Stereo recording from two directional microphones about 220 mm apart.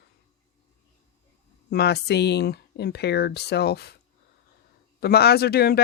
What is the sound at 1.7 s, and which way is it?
Speech, 50° left (ahead or behind).